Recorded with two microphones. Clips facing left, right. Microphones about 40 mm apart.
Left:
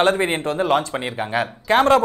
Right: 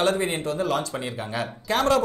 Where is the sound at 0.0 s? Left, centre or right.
Left.